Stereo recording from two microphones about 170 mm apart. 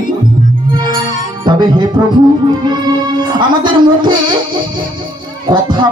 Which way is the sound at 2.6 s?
25° right (ahead or behind).